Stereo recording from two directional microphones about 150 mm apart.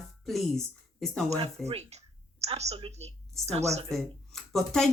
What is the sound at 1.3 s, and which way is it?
A woman's voice, 45° right (ahead or behind).